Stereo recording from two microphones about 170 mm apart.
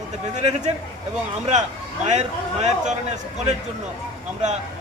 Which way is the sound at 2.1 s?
40° right (ahead or behind).